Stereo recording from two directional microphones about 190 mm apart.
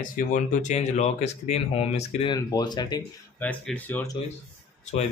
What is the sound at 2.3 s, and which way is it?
Speech, 20° left (ahead or behind).